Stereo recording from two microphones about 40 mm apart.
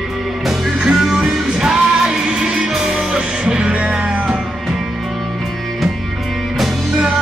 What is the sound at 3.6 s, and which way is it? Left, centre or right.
Music, right.